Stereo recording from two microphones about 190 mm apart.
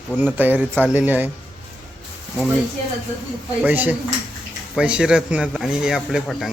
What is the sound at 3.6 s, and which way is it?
A man's voice, 10° right (ahead or behind).